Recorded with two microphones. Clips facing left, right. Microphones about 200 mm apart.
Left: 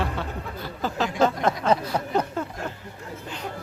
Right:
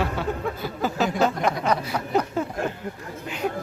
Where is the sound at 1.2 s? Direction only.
25° left (ahead or behind).